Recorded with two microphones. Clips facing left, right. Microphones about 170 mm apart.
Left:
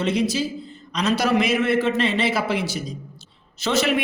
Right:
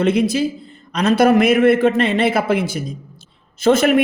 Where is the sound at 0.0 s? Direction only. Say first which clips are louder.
Right 6 dB; 55° right (ahead or behind).